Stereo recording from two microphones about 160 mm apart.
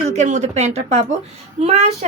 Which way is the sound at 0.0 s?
45° right (ahead or behind).